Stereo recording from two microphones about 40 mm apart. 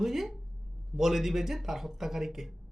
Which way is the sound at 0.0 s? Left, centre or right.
Centre.